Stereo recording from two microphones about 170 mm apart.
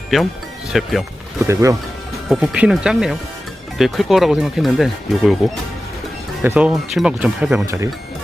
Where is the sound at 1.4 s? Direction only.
20° right (ahead or behind).